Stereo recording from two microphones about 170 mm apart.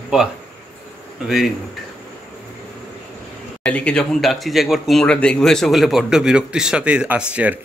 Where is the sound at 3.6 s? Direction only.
5° left (ahead or behind).